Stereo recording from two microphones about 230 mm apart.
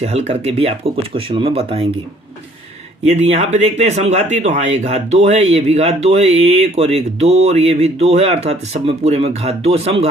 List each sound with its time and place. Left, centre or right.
0.0 s speech: right
3.1 s speech: right